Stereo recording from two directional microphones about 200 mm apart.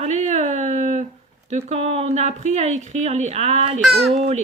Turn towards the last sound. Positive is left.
turn(degrees=-30)  # may be behind; listen again after turning